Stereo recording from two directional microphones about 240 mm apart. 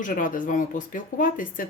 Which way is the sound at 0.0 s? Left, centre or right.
Left.